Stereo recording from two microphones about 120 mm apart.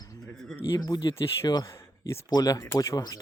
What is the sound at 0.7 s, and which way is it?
Speech, 35° left (ahead or behind).